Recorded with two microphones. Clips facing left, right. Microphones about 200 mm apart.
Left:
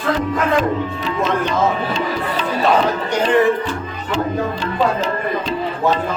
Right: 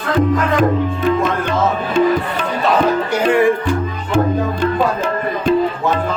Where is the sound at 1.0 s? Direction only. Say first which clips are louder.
Right 2 dB; 50° right (ahead or behind).